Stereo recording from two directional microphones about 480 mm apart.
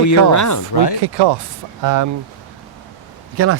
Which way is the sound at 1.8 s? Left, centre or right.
Right.